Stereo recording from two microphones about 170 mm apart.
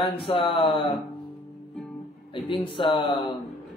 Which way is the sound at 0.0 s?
35° left (ahead or behind).